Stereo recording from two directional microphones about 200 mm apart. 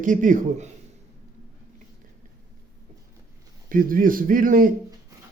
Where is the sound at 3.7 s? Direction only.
45° right (ahead or behind).